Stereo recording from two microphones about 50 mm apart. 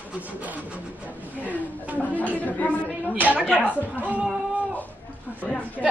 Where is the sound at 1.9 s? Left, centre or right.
Left.